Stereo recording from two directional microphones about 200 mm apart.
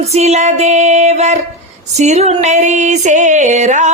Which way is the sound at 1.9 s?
35° right (ahead or behind).